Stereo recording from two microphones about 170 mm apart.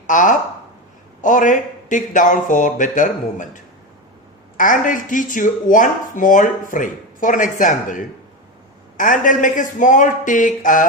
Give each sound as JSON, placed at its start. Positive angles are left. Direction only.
{"t": 0.1, "sound": "speech", "side_deg": 50}